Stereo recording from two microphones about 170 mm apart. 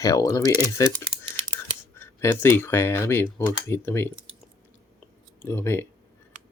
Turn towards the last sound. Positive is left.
turn(degrees=15)  # may be behind; listen again after turning